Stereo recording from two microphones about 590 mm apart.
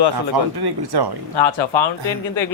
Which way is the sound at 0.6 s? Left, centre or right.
Right.